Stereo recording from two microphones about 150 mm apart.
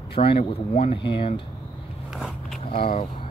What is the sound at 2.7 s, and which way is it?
Speech, 40° left (ahead or behind).